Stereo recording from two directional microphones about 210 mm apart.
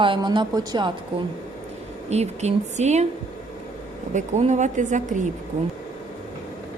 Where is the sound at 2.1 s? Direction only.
30° right (ahead or behind).